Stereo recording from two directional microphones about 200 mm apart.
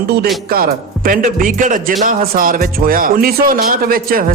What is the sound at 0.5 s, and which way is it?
Speech, 45° right (ahead or behind).